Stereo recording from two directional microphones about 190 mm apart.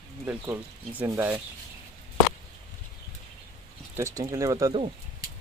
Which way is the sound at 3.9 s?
15° right (ahead or behind).